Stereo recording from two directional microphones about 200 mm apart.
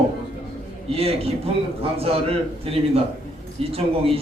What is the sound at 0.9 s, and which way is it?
A man's voice, 30° right (ahead or behind).